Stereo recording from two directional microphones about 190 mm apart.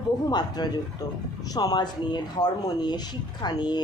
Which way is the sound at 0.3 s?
20° left (ahead or behind).